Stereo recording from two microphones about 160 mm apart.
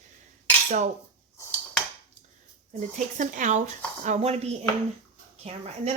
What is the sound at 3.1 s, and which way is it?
Speech, 50° right (ahead or behind).